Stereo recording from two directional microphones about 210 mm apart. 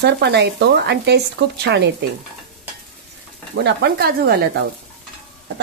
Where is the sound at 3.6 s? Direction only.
50° right (ahead or behind).